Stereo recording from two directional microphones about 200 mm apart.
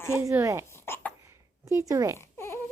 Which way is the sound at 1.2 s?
15° right (ahead or behind).